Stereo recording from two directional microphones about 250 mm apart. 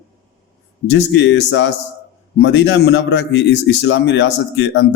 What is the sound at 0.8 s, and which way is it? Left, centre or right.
A man's voice, left.